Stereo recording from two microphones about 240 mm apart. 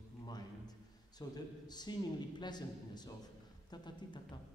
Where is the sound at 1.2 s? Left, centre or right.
Centre.